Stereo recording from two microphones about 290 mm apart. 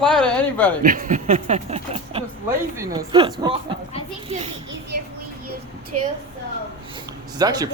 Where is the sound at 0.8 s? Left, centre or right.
Right.